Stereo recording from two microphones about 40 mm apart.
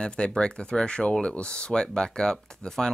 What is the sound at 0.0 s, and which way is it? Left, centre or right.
Speech, left.